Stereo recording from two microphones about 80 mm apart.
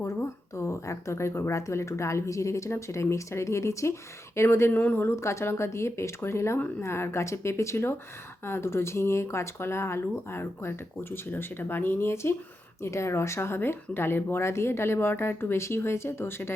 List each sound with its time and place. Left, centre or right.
0.0 s speech: left
4.8 s speech: left
5.0 s speech: left